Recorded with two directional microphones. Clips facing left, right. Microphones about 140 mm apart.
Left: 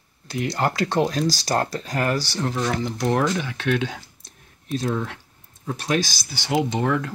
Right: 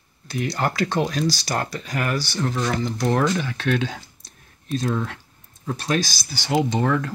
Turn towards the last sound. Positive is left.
turn(degrees=10)  # may be behind; listen again after turning